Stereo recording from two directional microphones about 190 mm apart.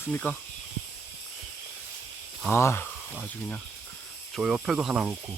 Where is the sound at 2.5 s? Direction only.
15° left (ahead or behind); by 5.2 s 5° right (ahead or behind).